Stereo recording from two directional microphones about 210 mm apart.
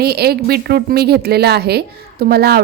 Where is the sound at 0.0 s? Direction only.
50° right (ahead or behind).